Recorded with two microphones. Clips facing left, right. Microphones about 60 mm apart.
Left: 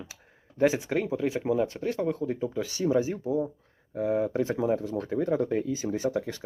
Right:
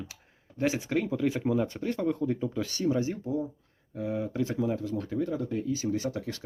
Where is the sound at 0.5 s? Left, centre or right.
Left.